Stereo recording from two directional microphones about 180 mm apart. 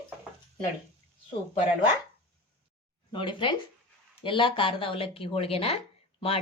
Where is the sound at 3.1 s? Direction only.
25° left (ahead or behind).